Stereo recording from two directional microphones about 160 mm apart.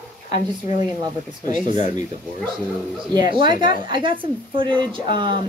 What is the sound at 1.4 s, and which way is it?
Speech, 50° left (ahead or behind).